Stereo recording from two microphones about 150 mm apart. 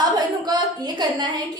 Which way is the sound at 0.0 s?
30° right (ahead or behind).